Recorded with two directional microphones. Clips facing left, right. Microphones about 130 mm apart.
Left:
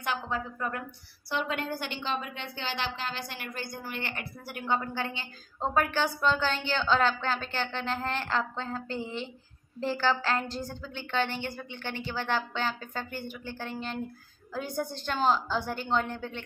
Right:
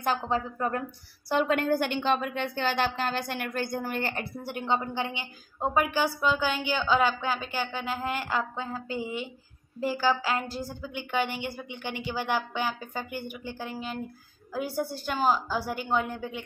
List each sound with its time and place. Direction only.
0.0 s a woman's voice: 35° right (ahead or behind)
1.3 s a woman's voice: 50° right (ahead or behind); by 16.4 s 10° right (ahead or behind)